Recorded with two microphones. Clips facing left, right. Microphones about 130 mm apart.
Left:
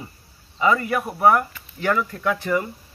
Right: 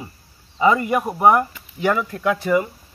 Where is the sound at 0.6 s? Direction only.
20° right (ahead or behind).